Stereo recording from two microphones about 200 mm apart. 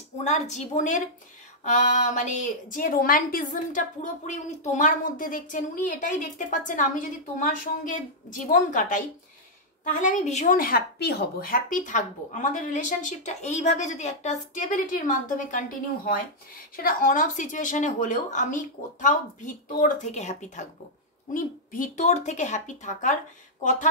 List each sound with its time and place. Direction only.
0.2 s a woman's voice: 35° left (ahead or behind)
10.0 s a woman's voice: 35° left (ahead or behind)
16.7 s a woman's voice: 45° left (ahead or behind)